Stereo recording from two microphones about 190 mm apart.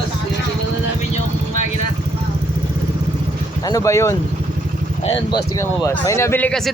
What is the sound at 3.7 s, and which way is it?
Speech, 15° left (ahead or behind).